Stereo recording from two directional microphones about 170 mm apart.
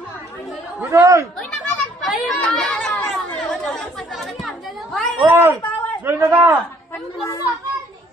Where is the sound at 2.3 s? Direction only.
5° left (ahead or behind).